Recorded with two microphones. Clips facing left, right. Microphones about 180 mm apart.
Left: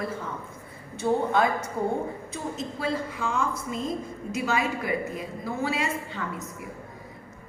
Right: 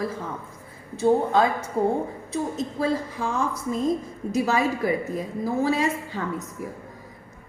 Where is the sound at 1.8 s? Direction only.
35° right (ahead or behind).